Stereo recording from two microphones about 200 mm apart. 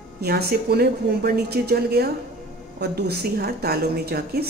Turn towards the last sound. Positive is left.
turn(degrees=-50)  # may be behind; listen again after turning